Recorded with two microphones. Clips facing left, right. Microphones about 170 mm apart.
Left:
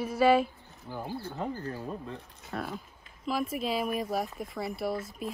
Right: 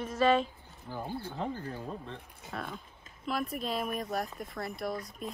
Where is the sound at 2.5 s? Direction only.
5° left (ahead or behind).